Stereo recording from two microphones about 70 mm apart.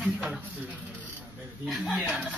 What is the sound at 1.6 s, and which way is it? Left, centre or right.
Speech, centre.